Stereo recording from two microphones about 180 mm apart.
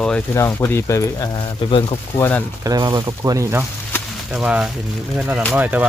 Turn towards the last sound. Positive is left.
turn(degrees=-10)  # may be behind; listen again after turning